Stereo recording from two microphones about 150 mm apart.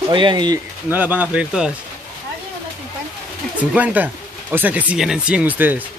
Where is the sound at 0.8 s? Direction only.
10° right (ahead or behind).